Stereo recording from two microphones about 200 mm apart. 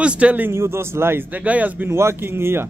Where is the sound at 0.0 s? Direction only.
5° right (ahead or behind).